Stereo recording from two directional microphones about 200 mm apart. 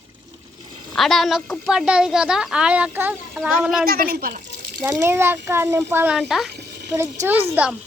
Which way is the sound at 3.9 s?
45° right (ahead or behind).